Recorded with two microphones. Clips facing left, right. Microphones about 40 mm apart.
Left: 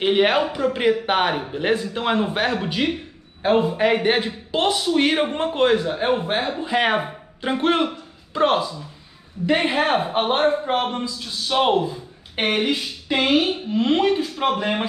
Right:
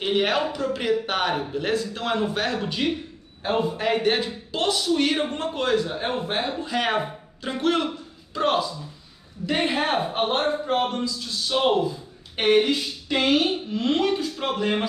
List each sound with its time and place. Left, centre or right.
0.0 s a man's voice: left